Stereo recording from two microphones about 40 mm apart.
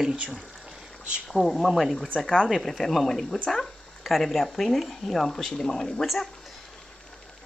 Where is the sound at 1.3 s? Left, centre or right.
Centre.